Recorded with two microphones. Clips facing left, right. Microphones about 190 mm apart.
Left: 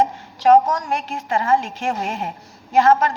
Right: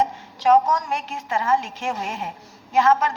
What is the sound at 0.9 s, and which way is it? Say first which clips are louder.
A woman's voice: left 4 dB; 60° left (ahead or behind).